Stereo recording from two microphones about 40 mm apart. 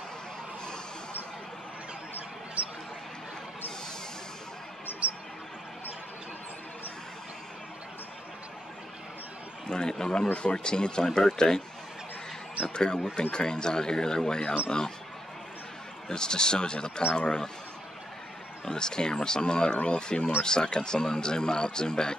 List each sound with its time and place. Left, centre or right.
2.6 s basketball bounce: right
5.0 s a sound: right
9.7 s speech: centre
12.6 s speech: centre
16.1 s speech: centre
18.7 s speech: centre